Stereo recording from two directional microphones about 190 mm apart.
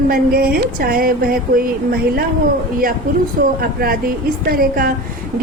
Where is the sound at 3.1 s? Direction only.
45° right (ahead or behind).